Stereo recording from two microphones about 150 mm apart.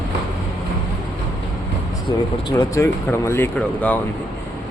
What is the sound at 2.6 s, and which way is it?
Speech, 20° left (ahead or behind).